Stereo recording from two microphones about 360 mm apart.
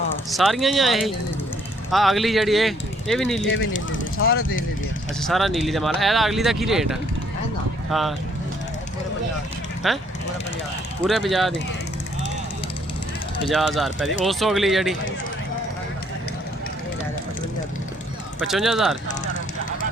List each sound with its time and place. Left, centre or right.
0.3 s speech: centre
3.4 s speech: left
5.3 s speech: centre
9.8 s speech: centre
11.0 s speech: centre
13.5 s speech: centre
18.3 s speech: centre